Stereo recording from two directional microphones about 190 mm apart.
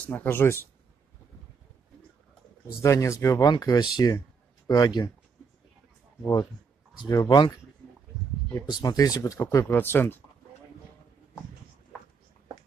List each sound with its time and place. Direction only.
0.0 s speech: 10° left (ahead or behind)
2.8 s speech: 15° left (ahead or behind)
7.1 s speech: 20° left (ahead or behind)
8.8 s speech: 20° left (ahead or behind)